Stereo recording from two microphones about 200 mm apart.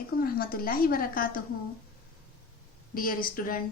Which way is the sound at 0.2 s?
45° left (ahead or behind).